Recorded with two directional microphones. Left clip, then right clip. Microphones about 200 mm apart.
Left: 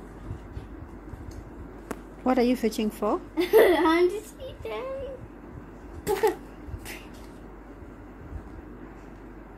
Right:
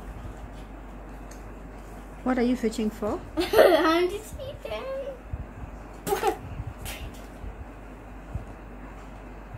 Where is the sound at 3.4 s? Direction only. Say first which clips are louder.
Right 1 dB; 15° right (ahead or behind).